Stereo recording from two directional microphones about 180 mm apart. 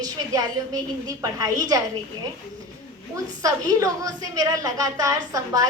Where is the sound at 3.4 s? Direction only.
20° right (ahead or behind).